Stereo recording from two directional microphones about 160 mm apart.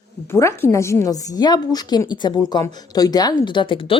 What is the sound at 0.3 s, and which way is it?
A woman's voice, 15° left (ahead or behind).